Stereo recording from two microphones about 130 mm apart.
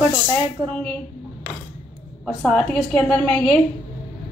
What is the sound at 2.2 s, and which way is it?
A woman's voice, 5° left (ahead or behind).